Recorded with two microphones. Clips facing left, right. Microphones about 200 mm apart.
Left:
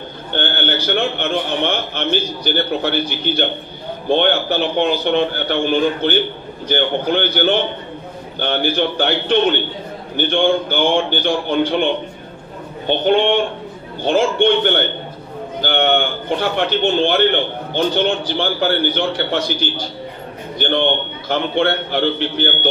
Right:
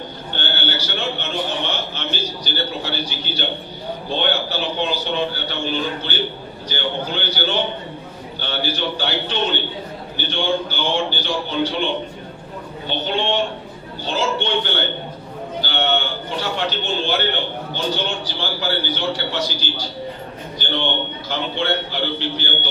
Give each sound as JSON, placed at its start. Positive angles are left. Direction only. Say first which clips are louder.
{"t": 0.3, "sound": "a man's voice", "louder": "left 6 dB", "side_deg": 55}